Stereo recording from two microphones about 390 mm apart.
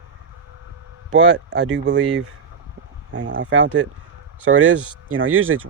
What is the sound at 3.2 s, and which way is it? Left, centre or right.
Speech, right.